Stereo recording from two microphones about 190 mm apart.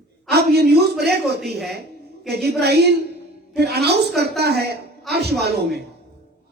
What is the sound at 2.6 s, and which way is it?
A man's voice, 60° right (ahead or behind).